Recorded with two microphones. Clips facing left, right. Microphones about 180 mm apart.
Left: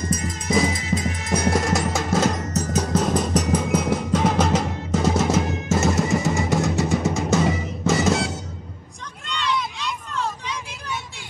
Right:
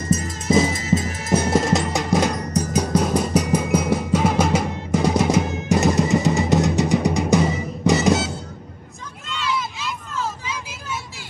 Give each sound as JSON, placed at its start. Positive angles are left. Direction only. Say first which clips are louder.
{"t": 0.1, "sound": "music", "louder": "right 5 dB", "side_deg": -25}
{"t": 9.3, "sound": "vehicle", "louder": "even", "side_deg": 0}